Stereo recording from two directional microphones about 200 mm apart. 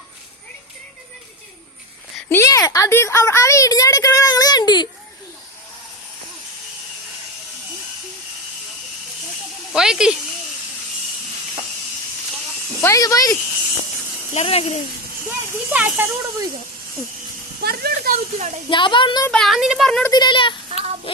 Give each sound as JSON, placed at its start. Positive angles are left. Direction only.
{"t": 2.3, "sound": "a woman's voice", "side_deg": 15}
{"t": 9.7, "sound": "speech", "side_deg": -5}
{"t": 12.8, "sound": "a woman's voice", "side_deg": 15}
{"t": 14.3, "sound": "speech", "side_deg": 30}
{"t": 15.7, "sound": "speech", "side_deg": -10}
{"t": 17.6, "sound": "a sound", "side_deg": -50}
{"t": 18.3, "sound": "a woman's voice", "side_deg": -35}
{"t": 18.7, "sound": "speech", "side_deg": 25}
{"t": 19.3, "sound": "speech", "side_deg": 0}
{"t": 20.1, "sound": "speech", "side_deg": 20}
{"t": 20.7, "sound": "child singing", "side_deg": -30}